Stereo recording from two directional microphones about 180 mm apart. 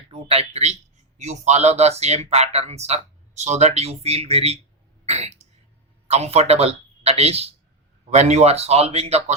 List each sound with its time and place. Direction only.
0.1 s speech: 35° right (ahead or behind)